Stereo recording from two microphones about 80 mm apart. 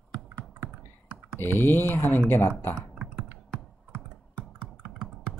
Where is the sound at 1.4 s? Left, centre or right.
Left.